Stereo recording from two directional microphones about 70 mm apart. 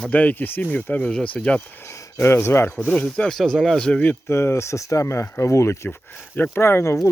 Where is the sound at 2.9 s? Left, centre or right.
Centre.